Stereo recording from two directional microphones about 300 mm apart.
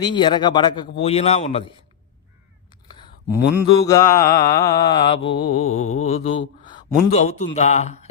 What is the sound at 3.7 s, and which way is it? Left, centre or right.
Mantra, centre.